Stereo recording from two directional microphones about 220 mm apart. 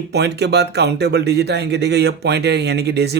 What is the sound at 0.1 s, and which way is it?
Speech, 50° right (ahead or behind).